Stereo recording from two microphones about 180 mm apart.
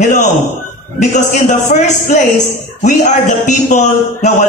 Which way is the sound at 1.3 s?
45° left (ahead or behind).